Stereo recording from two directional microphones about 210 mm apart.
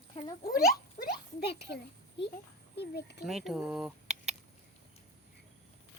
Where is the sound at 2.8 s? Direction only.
50° left (ahead or behind).